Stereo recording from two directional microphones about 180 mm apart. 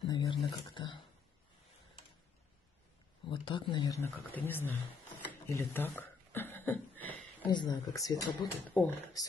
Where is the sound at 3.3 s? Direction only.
25° left (ahead or behind).